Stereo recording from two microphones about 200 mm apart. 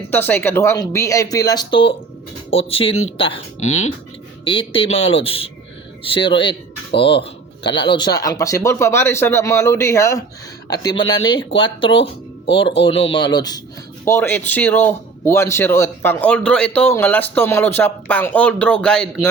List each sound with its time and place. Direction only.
0.1 s speech: 10° left (ahead or behind); by 3.4 s 25° left (ahead or behind)
3.6 s speech: 90° left
4.4 s speech: 25° left (ahead or behind); by 19.3 s 5° left (ahead or behind)